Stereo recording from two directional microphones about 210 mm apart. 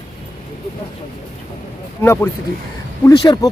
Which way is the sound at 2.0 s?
10° left (ahead or behind).